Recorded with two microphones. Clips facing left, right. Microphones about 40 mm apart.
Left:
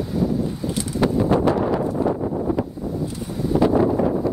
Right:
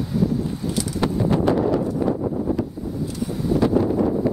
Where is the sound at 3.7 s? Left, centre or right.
Centre.